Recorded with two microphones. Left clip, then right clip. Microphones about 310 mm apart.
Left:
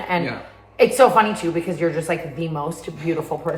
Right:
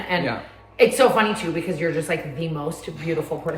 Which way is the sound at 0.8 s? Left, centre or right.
Centre.